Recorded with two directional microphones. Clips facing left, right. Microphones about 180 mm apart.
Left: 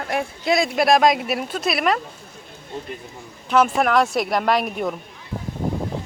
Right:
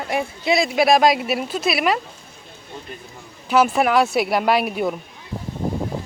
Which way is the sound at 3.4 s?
5° right (ahead or behind).